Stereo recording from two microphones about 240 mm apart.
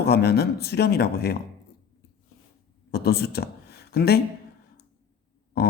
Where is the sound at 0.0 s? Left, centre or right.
Left.